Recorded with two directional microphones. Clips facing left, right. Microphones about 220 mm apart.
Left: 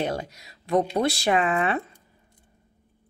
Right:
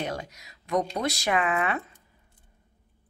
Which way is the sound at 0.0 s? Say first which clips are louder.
Left 5 dB; 30° left (ahead or behind).